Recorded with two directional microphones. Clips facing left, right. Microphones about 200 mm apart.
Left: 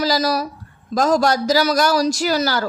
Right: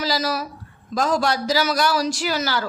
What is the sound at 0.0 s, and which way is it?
A woman's voice, 40° left (ahead or behind).